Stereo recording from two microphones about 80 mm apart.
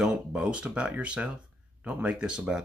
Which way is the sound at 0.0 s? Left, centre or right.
Centre.